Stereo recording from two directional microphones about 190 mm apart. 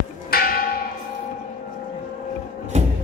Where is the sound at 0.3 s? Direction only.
50° left (ahead or behind).